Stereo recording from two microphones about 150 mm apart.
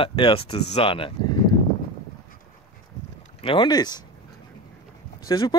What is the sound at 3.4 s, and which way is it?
Speech, 35° left (ahead or behind).